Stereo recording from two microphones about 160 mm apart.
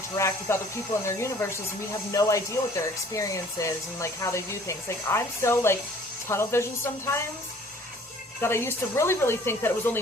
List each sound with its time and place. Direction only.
0.1 s speech: 20° left (ahead or behind)
8.4 s speech: 15° left (ahead or behind)